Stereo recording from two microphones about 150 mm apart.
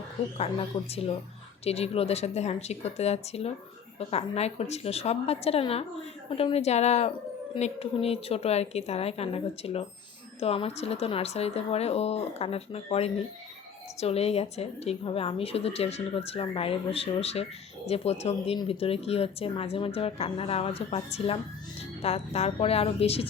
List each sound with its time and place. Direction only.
0.3 s a woman's voice: 40° left (ahead or behind)